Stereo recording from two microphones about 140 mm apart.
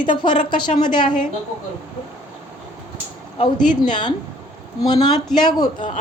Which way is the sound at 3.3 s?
35° left (ahead or behind).